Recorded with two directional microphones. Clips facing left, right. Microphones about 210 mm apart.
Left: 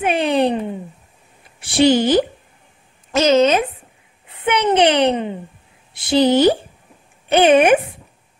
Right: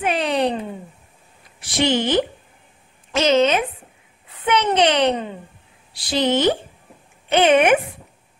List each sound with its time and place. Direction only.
0.0 s a sound: 25° left (ahead or behind)
1.6 s a woman's voice: 30° left (ahead or behind)
4.3 s a child's voice: 25° left (ahead or behind)